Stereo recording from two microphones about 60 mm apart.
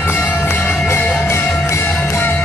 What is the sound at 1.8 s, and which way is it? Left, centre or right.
Music, left.